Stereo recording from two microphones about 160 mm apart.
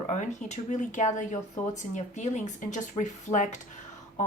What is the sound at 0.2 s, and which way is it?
A woman's voice, 45° left (ahead or behind).